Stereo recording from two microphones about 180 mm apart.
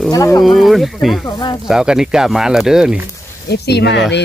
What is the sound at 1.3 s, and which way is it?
Speech, 25° left (ahead or behind).